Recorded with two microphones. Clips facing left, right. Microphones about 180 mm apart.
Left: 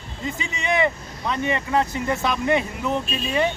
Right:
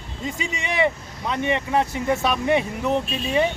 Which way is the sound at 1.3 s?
20° right (ahead or behind).